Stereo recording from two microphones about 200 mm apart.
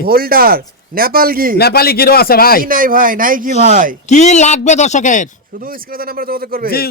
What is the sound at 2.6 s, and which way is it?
Speech, 45° right (ahead or behind).